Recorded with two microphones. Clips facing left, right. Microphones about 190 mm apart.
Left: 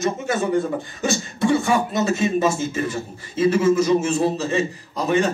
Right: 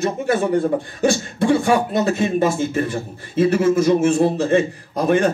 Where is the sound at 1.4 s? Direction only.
55° right (ahead or behind).